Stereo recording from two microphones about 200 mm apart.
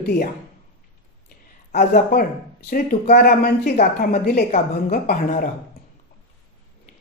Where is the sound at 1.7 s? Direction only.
50° left (ahead or behind).